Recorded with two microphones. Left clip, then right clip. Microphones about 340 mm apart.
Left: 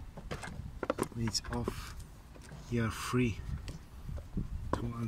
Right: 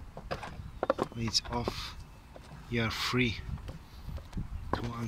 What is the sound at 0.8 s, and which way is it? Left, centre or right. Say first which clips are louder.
Speech: right 4 dB; centre.